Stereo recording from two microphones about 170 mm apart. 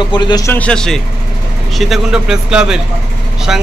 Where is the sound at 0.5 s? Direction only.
5° left (ahead or behind).